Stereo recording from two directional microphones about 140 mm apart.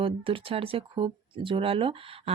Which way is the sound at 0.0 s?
40° right (ahead or behind).